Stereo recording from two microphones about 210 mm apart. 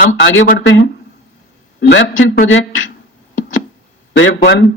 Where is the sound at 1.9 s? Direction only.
65° left (ahead or behind).